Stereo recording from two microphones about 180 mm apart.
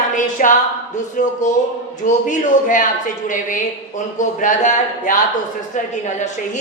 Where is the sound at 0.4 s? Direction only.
50° left (ahead or behind).